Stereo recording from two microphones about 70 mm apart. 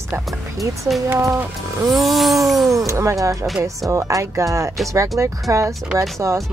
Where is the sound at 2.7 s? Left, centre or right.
Right.